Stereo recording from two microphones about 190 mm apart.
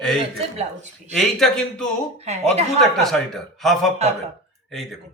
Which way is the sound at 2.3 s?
35° right (ahead or behind).